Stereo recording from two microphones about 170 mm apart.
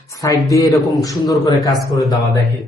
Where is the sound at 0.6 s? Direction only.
Centre (ahead or behind).